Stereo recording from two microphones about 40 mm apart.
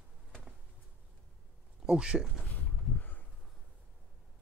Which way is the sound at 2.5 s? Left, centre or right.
Left.